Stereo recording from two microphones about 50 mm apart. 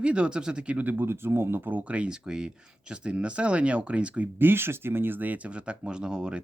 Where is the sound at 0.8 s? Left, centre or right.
Right.